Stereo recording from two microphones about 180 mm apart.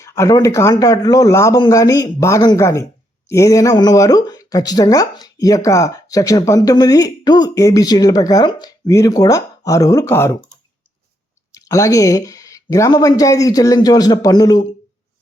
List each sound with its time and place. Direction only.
0.0 s speech: 15° left (ahead or behind)
11.5 s speech: 20° left (ahead or behind)